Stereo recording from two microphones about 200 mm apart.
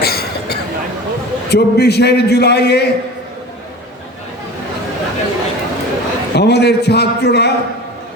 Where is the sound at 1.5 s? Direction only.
55° left (ahead or behind).